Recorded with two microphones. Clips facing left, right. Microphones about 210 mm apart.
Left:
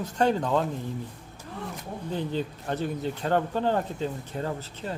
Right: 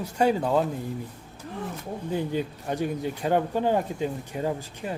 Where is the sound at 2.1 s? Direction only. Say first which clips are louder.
Right 2 dB; 10° right (ahead or behind).